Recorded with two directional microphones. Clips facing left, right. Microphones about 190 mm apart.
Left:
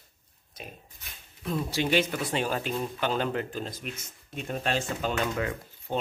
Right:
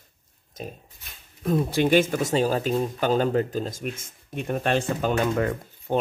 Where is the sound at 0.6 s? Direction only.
40° right (ahead or behind).